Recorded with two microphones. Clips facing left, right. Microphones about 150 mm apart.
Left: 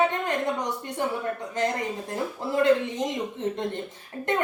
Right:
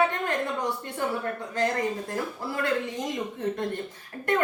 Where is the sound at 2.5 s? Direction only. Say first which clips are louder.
Left 7 dB; 20° left (ahead or behind).